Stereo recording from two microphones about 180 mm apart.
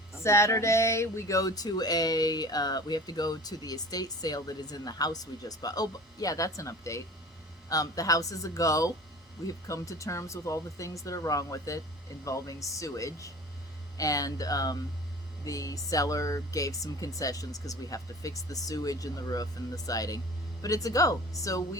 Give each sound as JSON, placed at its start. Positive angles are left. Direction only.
{"t": 0.2, "sound": "speech", "side_deg": 15}